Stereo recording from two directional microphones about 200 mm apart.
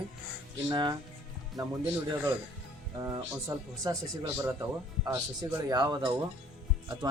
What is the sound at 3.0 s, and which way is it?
Speech, 15° right (ahead or behind).